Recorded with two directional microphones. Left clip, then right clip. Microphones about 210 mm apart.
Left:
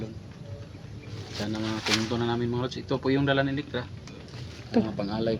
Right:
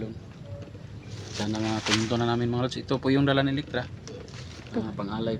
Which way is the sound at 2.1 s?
55° right (ahead or behind).